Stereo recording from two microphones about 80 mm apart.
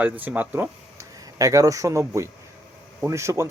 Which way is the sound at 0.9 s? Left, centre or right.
Right.